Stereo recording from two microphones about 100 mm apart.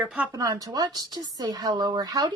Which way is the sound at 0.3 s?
35° right (ahead or behind).